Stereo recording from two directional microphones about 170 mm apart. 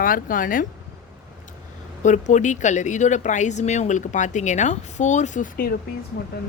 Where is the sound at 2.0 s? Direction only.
45° left (ahead or behind).